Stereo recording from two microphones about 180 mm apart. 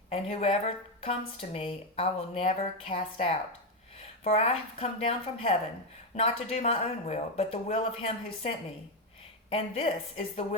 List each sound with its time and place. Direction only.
0.1 s speech: 30° left (ahead or behind)